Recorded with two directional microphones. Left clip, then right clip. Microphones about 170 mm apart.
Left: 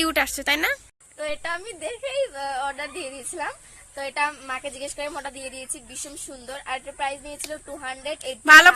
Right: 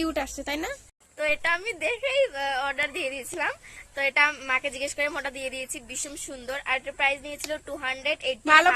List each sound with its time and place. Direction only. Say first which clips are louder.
0.0 s speech: left 6 dB; centre (ahead or behind)
1.2 s a woman's voice: right 4 dB; 25° right (ahead or behind)
2.7 s a woman's voice: right 5 dB; 30° right (ahead or behind)
4.2 s speech: right 2 dB; 15° right (ahead or behind)
4.9 s a woman's voice: right 2 dB; 30° right (ahead or behind)
6.5 s a woman's voice: right 3 dB; 15° right (ahead or behind)
8.3 s speech: left 8 dB; centre (ahead or behind)